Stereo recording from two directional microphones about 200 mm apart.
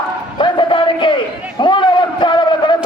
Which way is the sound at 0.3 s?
25° left (ahead or behind).